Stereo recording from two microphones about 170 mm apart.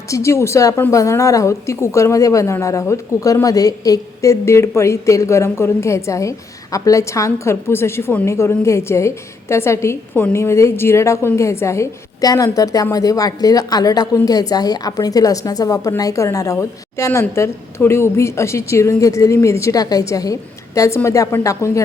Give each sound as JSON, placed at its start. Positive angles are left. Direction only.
{"t": 0.1, "sound": "a woman's voice", "side_deg": 15}